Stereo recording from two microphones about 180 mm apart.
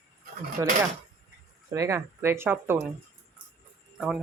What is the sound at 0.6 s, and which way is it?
Speech, 20° right (ahead or behind).